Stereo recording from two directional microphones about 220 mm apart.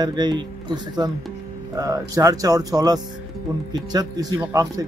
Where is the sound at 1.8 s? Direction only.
15° right (ahead or behind).